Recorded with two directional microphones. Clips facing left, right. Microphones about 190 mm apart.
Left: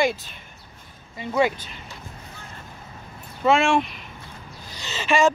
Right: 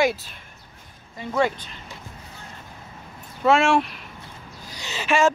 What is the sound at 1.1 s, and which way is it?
Speech, 5° left (ahead or behind).